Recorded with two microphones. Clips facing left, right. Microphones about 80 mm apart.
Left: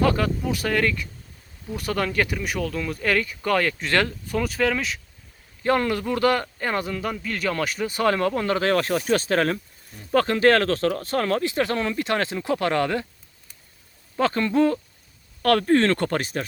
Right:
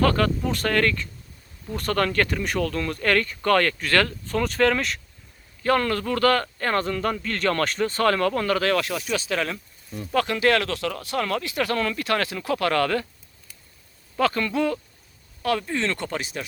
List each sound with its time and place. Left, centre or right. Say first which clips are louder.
0.0 s a man's voice: right 1 dB; centre
3.8 s speech: right 1 dB; centre
4.4 s speech: right 2 dB; centre
5.6 s a man's voice: even; centre
14.2 s speech: left 2 dB; left
15.4 s speech: left 7 dB; left